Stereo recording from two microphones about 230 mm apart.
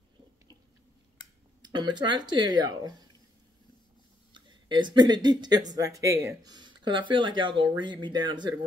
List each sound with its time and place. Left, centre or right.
1.6 s speech: centre
4.3 s speech: centre